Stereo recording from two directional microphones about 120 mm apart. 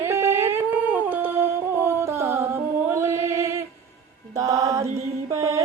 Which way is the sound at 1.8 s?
20° right (ahead or behind).